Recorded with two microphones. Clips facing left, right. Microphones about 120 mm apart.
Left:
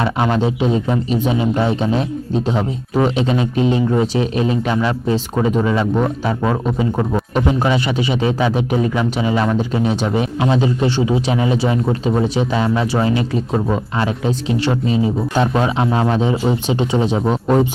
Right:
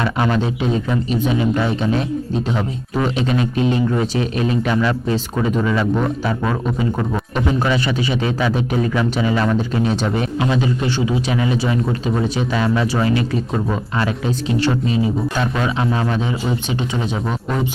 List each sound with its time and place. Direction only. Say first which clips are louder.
0.0 s speech: left 2 dB; 25° left (ahead or behind)